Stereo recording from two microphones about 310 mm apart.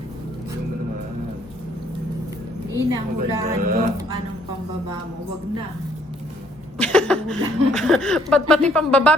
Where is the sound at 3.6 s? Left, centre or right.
Right.